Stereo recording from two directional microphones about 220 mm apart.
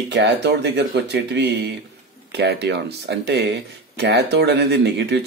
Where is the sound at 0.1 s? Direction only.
55° right (ahead or behind).